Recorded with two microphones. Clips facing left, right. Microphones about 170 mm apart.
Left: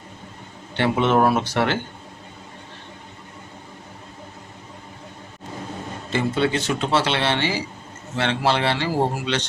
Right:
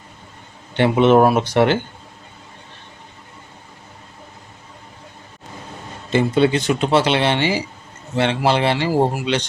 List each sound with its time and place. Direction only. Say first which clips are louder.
0.8 s speech: right 6 dB; 20° right (ahead or behind)
6.1 s speech: right 6 dB; 20° right (ahead or behind)